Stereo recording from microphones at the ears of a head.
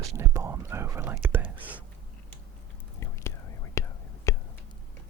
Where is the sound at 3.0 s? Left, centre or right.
Left.